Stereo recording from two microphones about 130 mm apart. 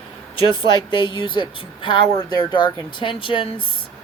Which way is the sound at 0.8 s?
35° left (ahead or behind).